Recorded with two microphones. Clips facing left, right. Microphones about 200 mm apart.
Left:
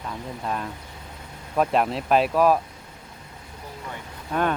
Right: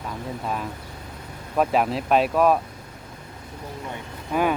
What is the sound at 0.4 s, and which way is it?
Speech, 5° right (ahead or behind).